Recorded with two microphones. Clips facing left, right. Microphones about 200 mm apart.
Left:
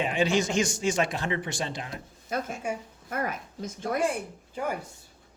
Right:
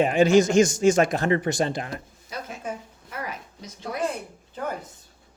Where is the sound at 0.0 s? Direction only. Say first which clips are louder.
Right 8 dB; 45° right (ahead or behind).